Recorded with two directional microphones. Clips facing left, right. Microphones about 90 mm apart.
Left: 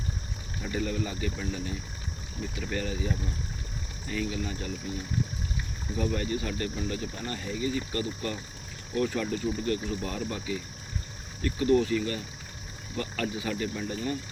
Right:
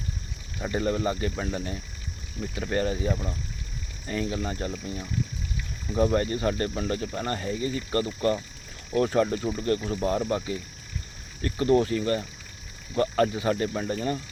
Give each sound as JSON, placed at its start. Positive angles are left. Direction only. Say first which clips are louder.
{"t": 0.6, "sound": "speech", "louder": "right 5 dB", "side_deg": -45}
{"t": 6.0, "sound": "speech", "louder": "right 6 dB", "side_deg": -45}